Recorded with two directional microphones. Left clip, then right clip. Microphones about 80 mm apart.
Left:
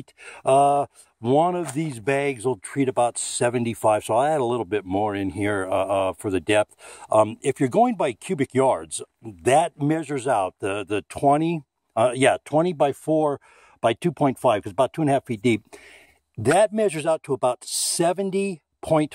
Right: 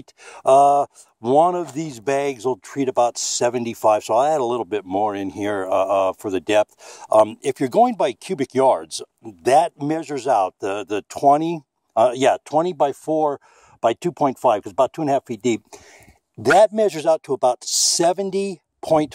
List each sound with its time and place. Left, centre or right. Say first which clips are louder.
0.2 s speech: right 4 dB; right
1.2 s speech: right 4 dB; right
2.5 s speech: right 3 dB; right
3.4 s speech: right 3 dB; right
7.4 s speech: right 2 dB; right
7.8 s speech: right 5 dB; right
9.4 s speech: right 3 dB; right
12.4 s speech: right 2 dB; centre
16.4 s speech: right 5 dB; right